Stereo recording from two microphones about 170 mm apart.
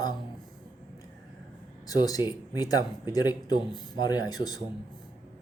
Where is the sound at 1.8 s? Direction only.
20° left (ahead or behind).